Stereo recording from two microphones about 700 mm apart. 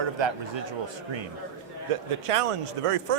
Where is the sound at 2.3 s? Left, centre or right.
Right.